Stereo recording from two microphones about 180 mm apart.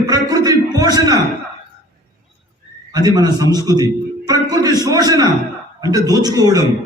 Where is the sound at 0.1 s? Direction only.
20° right (ahead or behind).